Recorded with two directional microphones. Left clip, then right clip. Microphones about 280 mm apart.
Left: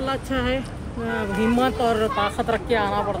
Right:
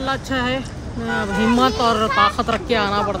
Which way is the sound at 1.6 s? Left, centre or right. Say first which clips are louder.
Right 5 dB; centre.